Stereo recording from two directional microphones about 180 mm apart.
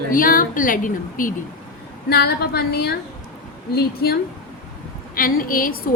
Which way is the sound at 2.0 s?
60° left (ahead or behind).